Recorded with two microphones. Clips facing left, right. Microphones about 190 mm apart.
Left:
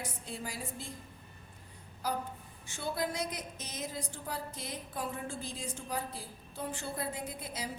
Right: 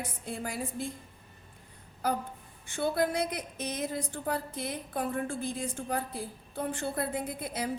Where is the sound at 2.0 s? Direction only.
60° right (ahead or behind).